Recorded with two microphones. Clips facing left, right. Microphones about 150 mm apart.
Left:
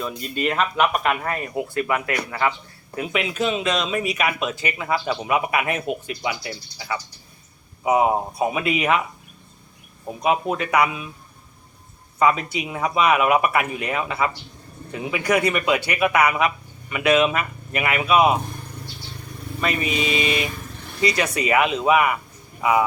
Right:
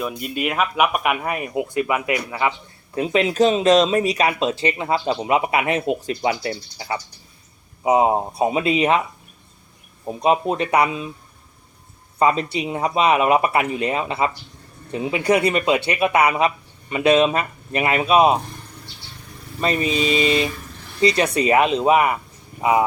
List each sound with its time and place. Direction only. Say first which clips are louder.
0.2 s speech: left 1 dB; 10° right (ahead or behind)
2.9 s speech: right 6 dB; 30° right (ahead or behind)
7.9 s speech: right 2 dB; 25° right (ahead or behind)
10.1 s speech: right 3 dB; 30° right (ahead or behind)
12.2 s speech: right 1 dB; 30° right (ahead or behind)
19.6 s speech: right 3 dB; 25° right (ahead or behind)